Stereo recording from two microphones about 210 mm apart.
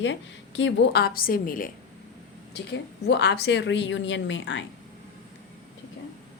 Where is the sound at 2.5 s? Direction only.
55° left (ahead or behind).